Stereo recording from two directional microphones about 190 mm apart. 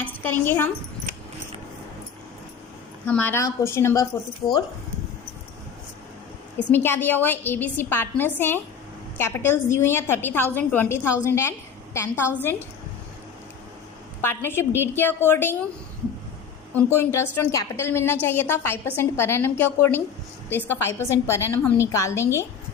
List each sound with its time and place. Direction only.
0.0 s a woman's voice: 10° left (ahead or behind)
3.1 s a woman's voice: 10° left (ahead or behind)
6.6 s a woman's voice: 10° left (ahead or behind)
14.2 s a woman's voice: 10° left (ahead or behind)
16.7 s a woman's voice: 10° left (ahead or behind)